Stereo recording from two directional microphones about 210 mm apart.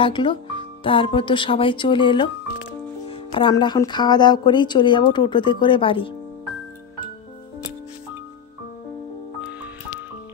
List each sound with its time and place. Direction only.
0.0 s speech: 25° left (ahead or behind)
9.4 s music: 5° right (ahead or behind)